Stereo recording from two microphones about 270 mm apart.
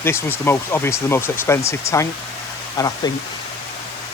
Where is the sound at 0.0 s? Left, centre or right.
Centre.